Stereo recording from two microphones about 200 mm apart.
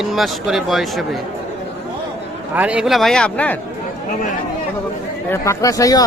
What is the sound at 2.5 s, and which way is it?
Speech, 5° right (ahead or behind).